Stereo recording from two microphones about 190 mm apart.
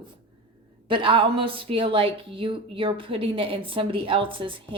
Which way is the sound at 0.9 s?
25° right (ahead or behind).